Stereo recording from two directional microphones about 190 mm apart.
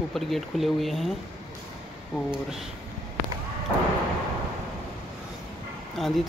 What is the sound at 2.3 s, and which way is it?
Speech, centre (ahead or behind).